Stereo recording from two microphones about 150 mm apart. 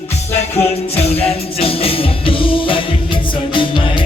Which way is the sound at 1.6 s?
40° left (ahead or behind).